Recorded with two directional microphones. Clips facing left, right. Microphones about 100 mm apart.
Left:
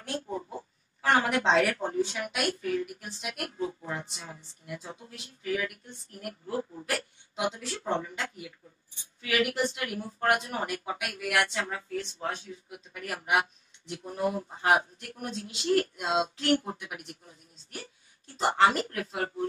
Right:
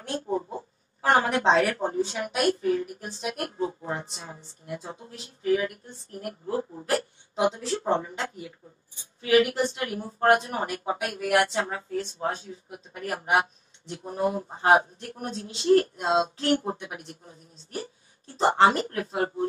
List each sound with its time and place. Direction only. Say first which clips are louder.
0.0 s a woman's voice: right 5 dB; 30° right (ahead or behind)